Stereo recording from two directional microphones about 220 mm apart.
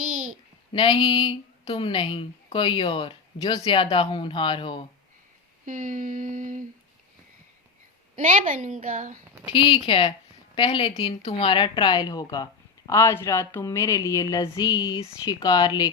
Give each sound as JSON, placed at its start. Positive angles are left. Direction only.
{"t": 0.0, "sound": "a sound", "side_deg": -35}
{"t": 0.7, "sound": "a woman's voice", "side_deg": 20}
{"t": 5.6, "sound": "a woman's voice", "side_deg": -35}
{"t": 8.1, "sound": "a woman's voice", "side_deg": -35}
{"t": 9.5, "sound": "a woman's voice", "side_deg": 20}